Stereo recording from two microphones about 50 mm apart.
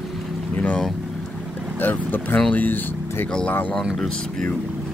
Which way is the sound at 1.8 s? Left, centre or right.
Left.